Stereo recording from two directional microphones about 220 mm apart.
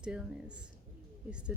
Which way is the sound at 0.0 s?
5° right (ahead or behind).